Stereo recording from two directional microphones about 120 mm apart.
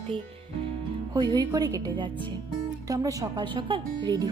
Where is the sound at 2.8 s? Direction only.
30° right (ahead or behind).